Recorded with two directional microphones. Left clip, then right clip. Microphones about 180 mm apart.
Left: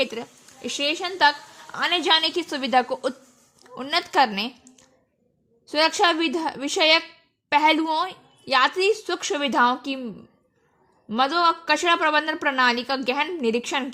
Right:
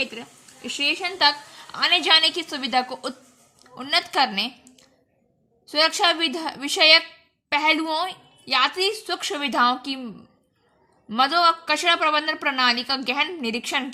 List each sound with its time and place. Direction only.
0.0 s a woman's voice: 35° left (ahead or behind)
5.6 s a woman's voice: 25° left (ahead or behind)
11.1 s a woman's voice: 20° left (ahead or behind)